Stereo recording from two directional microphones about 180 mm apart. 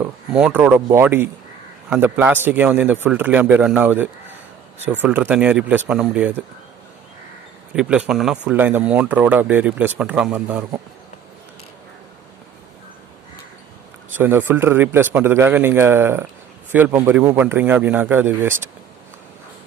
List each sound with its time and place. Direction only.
0.0 s speech: 5° right (ahead or behind)
7.7 s speech: 5° right (ahead or behind)
14.1 s speech: 10° right (ahead or behind)